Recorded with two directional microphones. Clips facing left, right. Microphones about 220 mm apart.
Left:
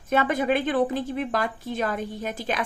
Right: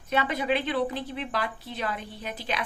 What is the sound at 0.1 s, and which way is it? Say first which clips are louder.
Speech: left 4 dB; 50° left (ahead or behind).